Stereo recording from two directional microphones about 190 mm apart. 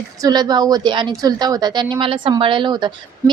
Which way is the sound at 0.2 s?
20° right (ahead or behind).